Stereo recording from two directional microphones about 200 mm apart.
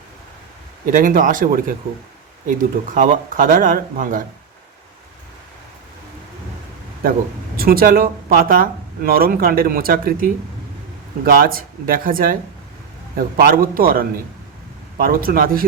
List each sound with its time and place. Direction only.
0.9 s speech: 40° right (ahead or behind)
7.5 s speech: 50° right (ahead or behind)